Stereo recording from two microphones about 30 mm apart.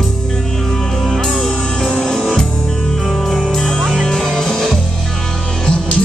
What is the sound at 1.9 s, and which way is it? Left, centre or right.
Music, left.